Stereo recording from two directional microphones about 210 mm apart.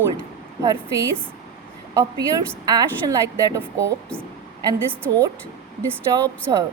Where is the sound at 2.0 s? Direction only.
15° right (ahead or behind).